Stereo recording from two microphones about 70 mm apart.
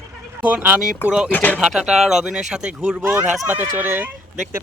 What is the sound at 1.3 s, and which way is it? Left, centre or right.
Speech, left.